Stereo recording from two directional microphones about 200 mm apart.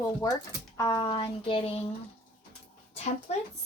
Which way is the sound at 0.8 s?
20° left (ahead or behind).